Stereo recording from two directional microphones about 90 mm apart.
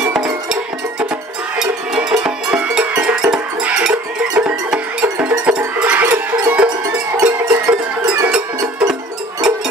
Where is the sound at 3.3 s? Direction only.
10° right (ahead or behind).